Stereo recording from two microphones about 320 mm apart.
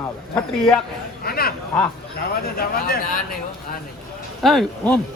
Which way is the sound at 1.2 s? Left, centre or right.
Left.